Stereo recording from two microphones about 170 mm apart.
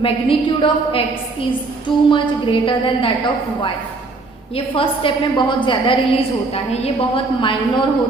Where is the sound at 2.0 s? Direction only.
30° left (ahead or behind).